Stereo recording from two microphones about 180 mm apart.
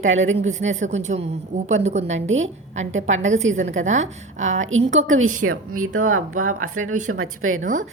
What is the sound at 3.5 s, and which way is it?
Speech, 40° right (ahead or behind).